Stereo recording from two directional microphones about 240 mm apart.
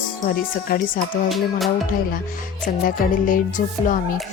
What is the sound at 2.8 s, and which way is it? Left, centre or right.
Speech, left.